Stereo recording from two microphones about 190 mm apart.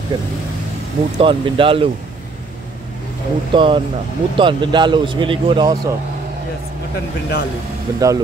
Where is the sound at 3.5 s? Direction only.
25° right (ahead or behind).